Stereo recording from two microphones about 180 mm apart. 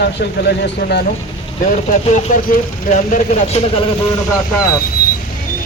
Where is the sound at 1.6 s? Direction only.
45° left (ahead or behind).